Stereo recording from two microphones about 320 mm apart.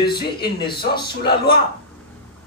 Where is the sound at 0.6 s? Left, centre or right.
Left.